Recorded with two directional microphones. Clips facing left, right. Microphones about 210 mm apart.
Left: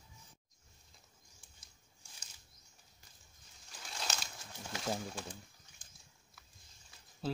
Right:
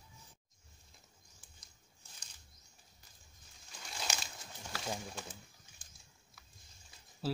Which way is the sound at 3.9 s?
Centre (ahead or behind).